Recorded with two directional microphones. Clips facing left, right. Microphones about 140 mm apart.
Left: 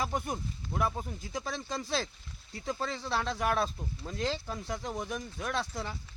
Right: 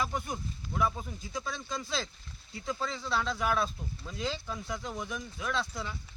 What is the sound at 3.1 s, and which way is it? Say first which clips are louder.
Speech: even; 40° left (ahead or behind).